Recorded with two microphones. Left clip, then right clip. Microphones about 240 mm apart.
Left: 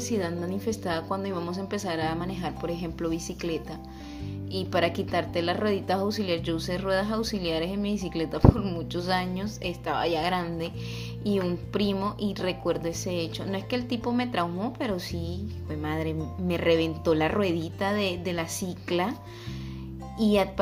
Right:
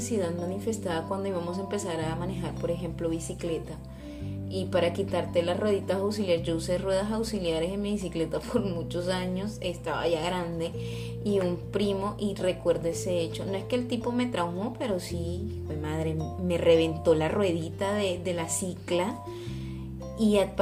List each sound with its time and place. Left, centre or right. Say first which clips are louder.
0.0 s a woman's voice: even; centre
4.5 s a woman's voice: even; centre
20.1 s a woman's voice: left 1 dB; centre